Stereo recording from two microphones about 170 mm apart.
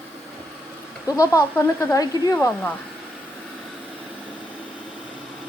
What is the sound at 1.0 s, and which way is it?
Speech, 20° left (ahead or behind).